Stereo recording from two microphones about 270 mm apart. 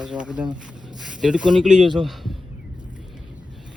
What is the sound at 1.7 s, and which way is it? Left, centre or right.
Speech, right.